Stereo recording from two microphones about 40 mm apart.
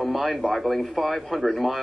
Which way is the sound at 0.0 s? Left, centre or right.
Centre.